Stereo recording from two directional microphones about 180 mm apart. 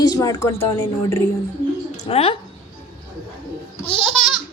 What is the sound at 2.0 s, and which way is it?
Speech, 30° left (ahead or behind).